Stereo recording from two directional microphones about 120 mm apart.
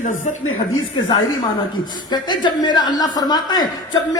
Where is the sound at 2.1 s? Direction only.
40° left (ahead or behind).